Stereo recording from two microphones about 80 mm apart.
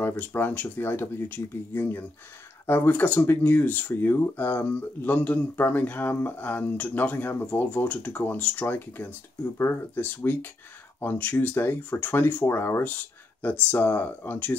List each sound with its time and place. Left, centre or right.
0.0 s speech: left